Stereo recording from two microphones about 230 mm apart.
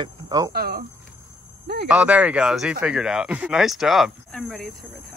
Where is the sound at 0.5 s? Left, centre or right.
Right.